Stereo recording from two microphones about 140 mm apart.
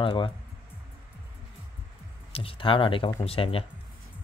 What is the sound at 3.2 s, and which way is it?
Speech, 40° left (ahead or behind).